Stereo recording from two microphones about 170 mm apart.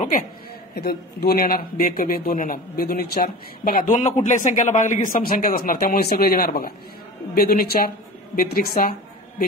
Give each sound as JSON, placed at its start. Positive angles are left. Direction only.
{"t": 0.7, "sound": "speech", "side_deg": 65}